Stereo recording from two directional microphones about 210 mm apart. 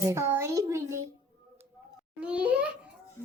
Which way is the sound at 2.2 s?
5° right (ahead or behind).